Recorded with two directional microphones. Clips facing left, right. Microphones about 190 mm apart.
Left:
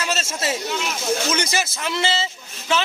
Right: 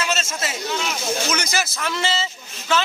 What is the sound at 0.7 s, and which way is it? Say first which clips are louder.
Speech: even; 5° left (ahead or behind).